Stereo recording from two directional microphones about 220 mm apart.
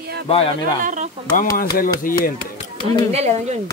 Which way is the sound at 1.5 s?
40° left (ahead or behind).